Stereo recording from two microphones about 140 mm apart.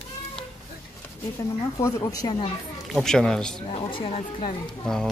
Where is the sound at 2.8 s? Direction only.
Centre (ahead or behind).